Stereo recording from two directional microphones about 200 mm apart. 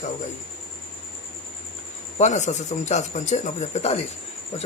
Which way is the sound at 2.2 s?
35° left (ahead or behind).